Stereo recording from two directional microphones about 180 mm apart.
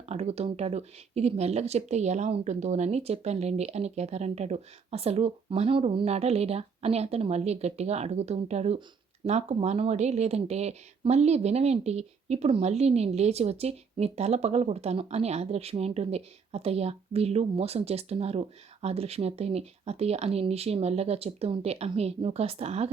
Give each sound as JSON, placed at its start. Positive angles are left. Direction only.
{"t": 0.0, "sound": "speech", "side_deg": -35}